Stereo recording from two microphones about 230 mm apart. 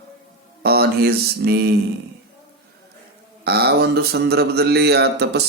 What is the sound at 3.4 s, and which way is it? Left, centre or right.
Speech, right.